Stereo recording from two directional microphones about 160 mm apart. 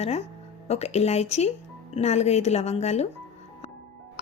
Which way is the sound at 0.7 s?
40° left (ahead or behind).